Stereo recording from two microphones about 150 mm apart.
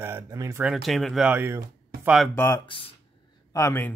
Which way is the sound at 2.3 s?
15° left (ahead or behind).